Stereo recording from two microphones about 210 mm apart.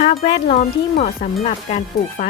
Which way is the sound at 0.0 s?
30° left (ahead or behind).